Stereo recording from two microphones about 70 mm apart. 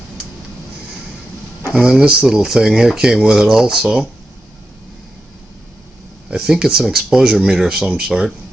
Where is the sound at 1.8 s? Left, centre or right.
Centre.